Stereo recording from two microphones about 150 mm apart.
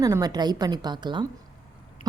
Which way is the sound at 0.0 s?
25° right (ahead or behind).